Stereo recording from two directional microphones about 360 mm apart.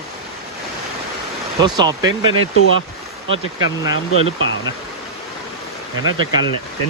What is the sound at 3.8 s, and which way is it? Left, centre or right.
Speech, centre.